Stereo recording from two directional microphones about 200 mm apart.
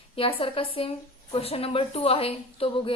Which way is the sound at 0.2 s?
30° left (ahead or behind).